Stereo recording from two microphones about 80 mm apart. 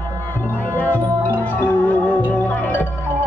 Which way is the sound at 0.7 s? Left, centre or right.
Left.